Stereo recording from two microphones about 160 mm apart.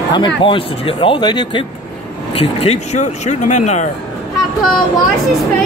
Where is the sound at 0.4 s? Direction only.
35° left (ahead or behind).